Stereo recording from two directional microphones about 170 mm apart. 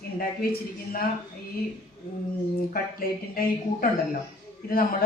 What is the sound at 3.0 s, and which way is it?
A woman's voice, 60° left (ahead or behind).